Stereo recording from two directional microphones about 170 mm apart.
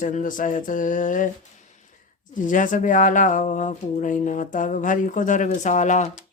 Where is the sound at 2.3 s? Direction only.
50° left (ahead or behind).